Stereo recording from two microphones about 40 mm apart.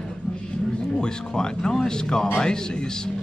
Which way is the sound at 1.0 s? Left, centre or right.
Centre.